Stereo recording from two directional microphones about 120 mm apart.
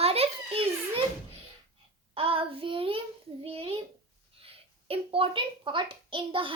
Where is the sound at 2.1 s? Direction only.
50° right (ahead or behind).